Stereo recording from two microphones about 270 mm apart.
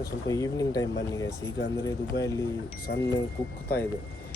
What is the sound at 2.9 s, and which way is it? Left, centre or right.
Speech, left.